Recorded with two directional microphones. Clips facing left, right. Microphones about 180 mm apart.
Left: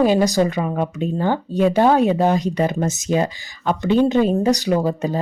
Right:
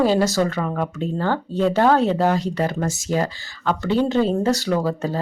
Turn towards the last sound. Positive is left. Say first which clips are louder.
# left 2 dB
turn(degrees=15)  # may be behind; listen again after turning